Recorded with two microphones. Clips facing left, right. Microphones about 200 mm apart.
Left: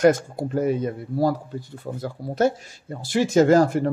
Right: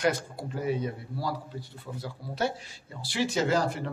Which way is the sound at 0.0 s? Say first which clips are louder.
Left 10 dB; 45° left (ahead or behind).